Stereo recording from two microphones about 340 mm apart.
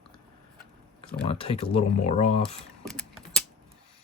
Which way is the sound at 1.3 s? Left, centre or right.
Centre.